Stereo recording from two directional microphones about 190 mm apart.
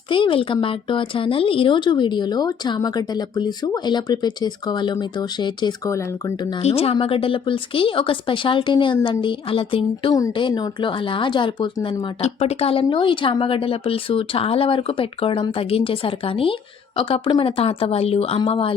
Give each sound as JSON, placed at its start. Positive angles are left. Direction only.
{"t": 0.1, "sound": "a woman's voice", "side_deg": 25}
{"t": 6.6, "sound": "a woman's voice", "side_deg": 30}